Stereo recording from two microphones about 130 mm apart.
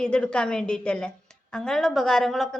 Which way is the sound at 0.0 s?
10° left (ahead or behind).